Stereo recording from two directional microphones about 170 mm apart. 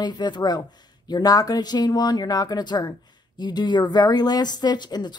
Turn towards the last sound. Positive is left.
turn(degrees=25)  # may be behind; listen again after turning